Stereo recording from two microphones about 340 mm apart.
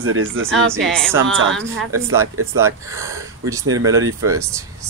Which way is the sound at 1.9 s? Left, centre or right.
Centre.